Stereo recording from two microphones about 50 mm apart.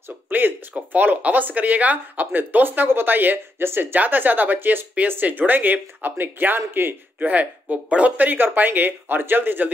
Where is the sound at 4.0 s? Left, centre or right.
Right.